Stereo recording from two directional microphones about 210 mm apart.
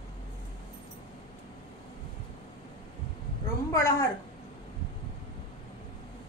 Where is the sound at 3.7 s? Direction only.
15° left (ahead or behind).